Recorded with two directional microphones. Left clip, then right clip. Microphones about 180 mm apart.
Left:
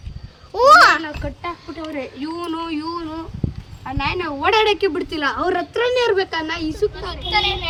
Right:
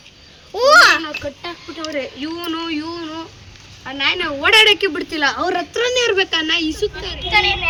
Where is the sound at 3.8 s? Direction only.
50° left (ahead or behind).